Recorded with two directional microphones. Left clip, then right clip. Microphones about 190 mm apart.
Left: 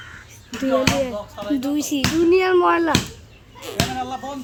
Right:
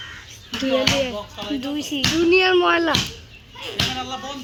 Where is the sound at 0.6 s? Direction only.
35° left (ahead or behind).